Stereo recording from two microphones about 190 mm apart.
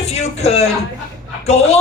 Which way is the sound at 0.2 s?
35° left (ahead or behind).